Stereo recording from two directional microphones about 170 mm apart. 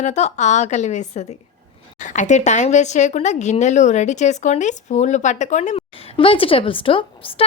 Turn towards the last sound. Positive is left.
turn(degrees=30)  # may be behind; listen again after turning